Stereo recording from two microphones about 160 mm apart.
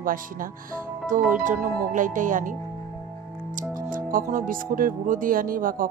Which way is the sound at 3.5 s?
55° right (ahead or behind).